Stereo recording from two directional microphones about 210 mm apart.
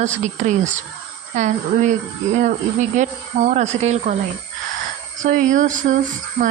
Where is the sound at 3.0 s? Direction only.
35° right (ahead or behind).